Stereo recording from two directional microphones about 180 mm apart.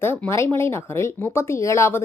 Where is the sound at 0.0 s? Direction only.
10° left (ahead or behind).